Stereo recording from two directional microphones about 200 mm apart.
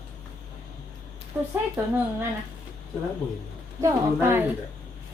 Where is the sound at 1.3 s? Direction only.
15° right (ahead or behind).